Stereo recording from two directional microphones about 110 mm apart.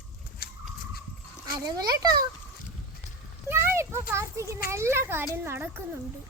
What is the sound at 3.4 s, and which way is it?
A child's voice, 20° right (ahead or behind).